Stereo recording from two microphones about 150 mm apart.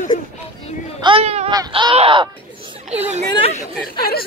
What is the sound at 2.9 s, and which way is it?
Speech, 45° right (ahead or behind).